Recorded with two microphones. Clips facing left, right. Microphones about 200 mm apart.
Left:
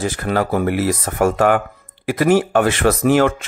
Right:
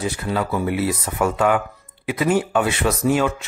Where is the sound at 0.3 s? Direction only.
75° left (ahead or behind).